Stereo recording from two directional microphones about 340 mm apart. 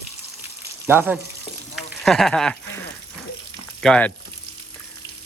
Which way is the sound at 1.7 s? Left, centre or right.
Centre.